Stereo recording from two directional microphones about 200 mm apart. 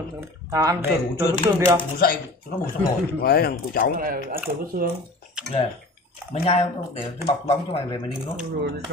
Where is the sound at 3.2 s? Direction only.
50° left (ahead or behind).